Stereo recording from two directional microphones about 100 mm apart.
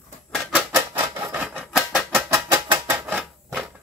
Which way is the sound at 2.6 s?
15° right (ahead or behind).